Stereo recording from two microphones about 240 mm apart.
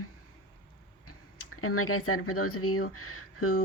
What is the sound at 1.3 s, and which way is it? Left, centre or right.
Speech, left.